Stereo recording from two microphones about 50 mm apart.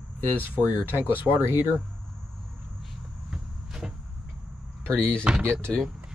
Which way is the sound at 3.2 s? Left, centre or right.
Centre.